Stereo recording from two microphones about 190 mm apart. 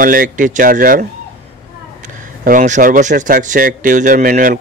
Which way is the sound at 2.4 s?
40° right (ahead or behind).